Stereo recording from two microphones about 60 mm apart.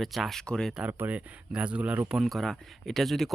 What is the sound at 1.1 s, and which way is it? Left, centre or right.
Speech, right.